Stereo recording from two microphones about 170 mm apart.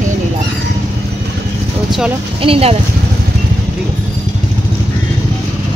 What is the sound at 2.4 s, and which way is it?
Speech, 35° right (ahead or behind).